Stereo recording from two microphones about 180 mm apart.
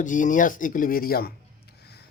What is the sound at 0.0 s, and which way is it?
Speech, 45° left (ahead or behind).